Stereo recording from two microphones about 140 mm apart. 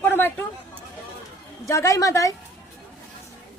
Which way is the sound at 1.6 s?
20° left (ahead or behind).